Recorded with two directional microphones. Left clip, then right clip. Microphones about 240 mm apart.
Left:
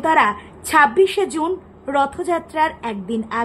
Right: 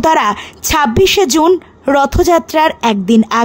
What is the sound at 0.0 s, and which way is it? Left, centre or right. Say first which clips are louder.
A woman's voice: right 5 dB; right.